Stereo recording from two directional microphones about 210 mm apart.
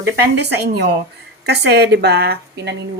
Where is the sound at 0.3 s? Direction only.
50° right (ahead or behind).